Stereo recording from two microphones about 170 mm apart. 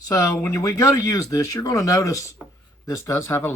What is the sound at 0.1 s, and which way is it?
Speech, 20° left (ahead or behind).